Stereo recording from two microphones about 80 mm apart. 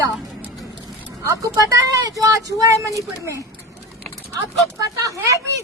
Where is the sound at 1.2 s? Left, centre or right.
Right.